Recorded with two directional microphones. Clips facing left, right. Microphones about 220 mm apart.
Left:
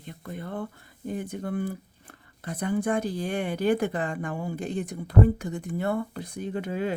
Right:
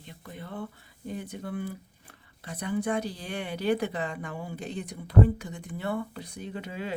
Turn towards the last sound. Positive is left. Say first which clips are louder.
# left 7 dB
turn(degrees=50)  # may be behind; listen again after turning